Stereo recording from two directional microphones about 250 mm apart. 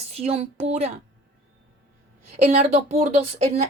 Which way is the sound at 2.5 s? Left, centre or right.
Right.